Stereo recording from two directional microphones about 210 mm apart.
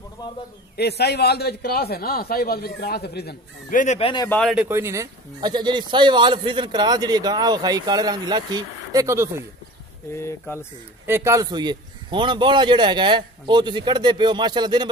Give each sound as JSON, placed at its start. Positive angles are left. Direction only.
{"t": 0.2, "sound": "a sound", "side_deg": 20}
{"t": 0.7, "sound": "a man's voice", "side_deg": 50}
{"t": 3.8, "sound": "speech", "side_deg": 35}
{"t": 4.3, "sound": "speech", "side_deg": 0}
{"t": 4.6, "sound": "speech", "side_deg": -15}
{"t": 10.1, "sound": "speech", "side_deg": 10}
{"t": 11.1, "sound": "speech", "side_deg": -10}